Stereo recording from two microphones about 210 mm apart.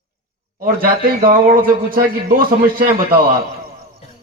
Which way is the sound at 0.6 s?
45° right (ahead or behind).